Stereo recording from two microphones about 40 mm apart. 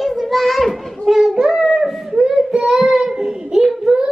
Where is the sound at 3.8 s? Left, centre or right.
Centre.